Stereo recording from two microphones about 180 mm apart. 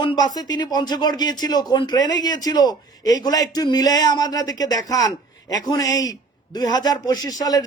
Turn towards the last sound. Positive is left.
turn(degrees=20)  # may be behind; listen again after turning